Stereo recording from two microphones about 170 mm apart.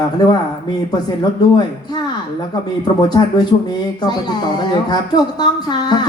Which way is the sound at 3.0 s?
25° left (ahead or behind).